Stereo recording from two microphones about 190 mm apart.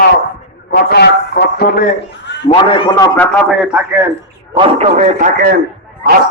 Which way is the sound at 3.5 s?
5° right (ahead or behind).